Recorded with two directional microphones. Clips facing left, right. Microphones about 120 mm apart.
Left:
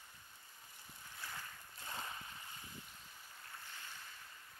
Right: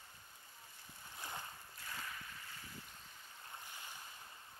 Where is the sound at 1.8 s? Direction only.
25° left (ahead or behind).